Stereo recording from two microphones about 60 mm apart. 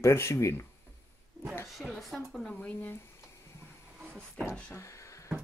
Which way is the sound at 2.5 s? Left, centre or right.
Left.